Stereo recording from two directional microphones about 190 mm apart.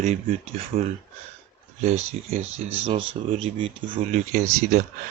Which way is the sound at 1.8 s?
35° right (ahead or behind).